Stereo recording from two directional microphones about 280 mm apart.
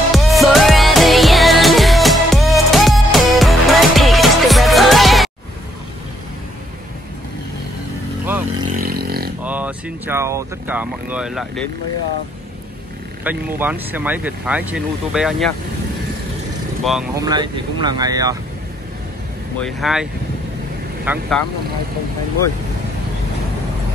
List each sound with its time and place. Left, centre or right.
0.1 s music: centre
8.7 s a sound: right
9.4 s speech: centre
13.2 s speech: centre
16.8 s speech: centre
17.1 s speech: centre
19.6 s speech: centre